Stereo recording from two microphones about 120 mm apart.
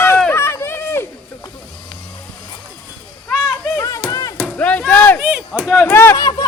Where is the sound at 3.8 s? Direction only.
25° left (ahead or behind).